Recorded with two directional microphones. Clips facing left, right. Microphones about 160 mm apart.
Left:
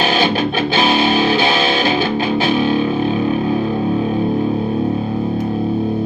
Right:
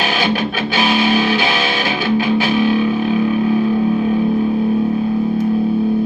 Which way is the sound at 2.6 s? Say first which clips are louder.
Right 1 dB; 40° left (ahead or behind).